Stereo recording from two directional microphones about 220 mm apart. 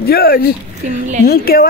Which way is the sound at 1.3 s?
40° left (ahead or behind).